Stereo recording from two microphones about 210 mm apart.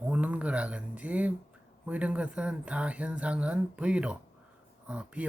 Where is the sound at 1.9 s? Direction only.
5° right (ahead or behind).